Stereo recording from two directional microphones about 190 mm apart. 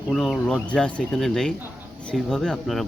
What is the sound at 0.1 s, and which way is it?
Speech, 5° left (ahead or behind).